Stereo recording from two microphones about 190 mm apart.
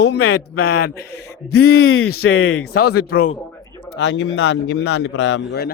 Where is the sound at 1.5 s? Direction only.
75° left (ahead or behind); by 2.6 s 90° left.